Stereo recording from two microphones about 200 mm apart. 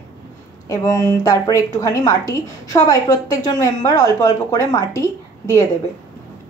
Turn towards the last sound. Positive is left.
turn(degrees=15)  # may be behind; listen again after turning